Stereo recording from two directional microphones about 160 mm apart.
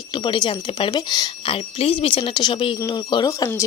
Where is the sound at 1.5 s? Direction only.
35° left (ahead or behind).